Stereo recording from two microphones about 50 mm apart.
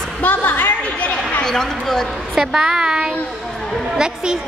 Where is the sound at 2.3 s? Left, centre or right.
Centre.